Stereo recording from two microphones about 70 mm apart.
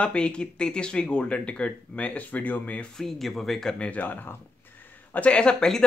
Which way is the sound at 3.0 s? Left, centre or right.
Centre.